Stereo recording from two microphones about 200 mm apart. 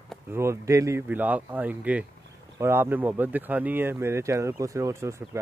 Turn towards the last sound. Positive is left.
turn(degrees=-15)  # may be behind; listen again after turning